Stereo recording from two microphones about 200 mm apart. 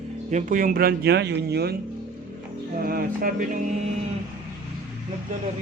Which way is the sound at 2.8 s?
45° right (ahead or behind).